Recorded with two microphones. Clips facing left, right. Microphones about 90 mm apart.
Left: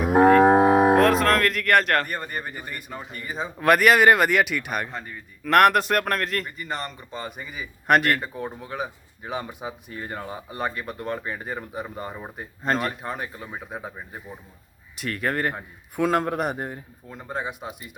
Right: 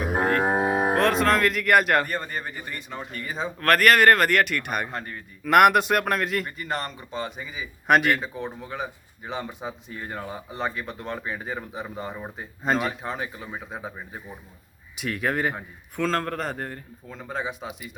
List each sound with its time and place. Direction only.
0.1 s cattle: 90° left
0.9 s a man's voice: centre (ahead or behind)
2.0 s a man's voice: 10° left (ahead or behind)
16.0 s speech: 15° left (ahead or behind)